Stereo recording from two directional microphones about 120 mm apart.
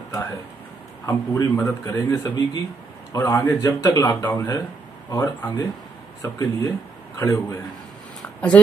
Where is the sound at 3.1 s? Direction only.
25° left (ahead or behind).